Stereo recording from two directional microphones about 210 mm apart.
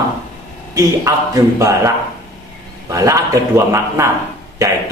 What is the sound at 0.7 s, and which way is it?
Speech, 15° right (ahead or behind).